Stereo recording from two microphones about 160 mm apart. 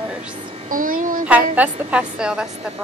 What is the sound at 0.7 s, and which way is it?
Speech, 60° right (ahead or behind).